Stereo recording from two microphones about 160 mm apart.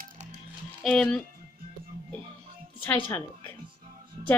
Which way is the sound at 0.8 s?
5° left (ahead or behind).